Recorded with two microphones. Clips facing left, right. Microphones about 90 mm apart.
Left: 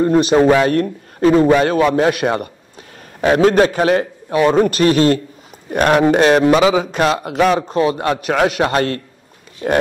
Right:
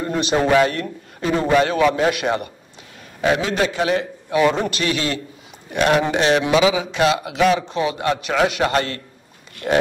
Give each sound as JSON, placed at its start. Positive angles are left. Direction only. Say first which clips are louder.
{"t": 0.0, "sound": "a man's voice", "louder": "left 8 dB", "side_deg": 40}